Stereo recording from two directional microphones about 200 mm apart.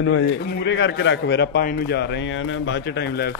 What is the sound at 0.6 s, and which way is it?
A man's voice, 60° left (ahead or behind).